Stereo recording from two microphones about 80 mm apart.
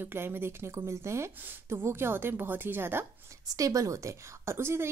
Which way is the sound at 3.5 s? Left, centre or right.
Right.